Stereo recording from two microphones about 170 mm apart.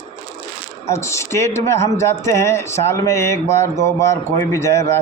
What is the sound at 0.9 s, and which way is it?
A man's voice, 15° left (ahead or behind).